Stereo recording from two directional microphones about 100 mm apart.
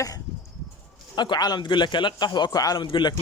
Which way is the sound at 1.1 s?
45° left (ahead or behind).